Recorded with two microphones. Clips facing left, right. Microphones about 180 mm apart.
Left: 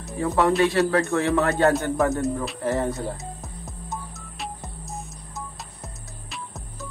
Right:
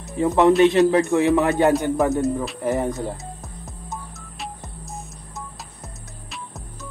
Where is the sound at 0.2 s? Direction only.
20° right (ahead or behind).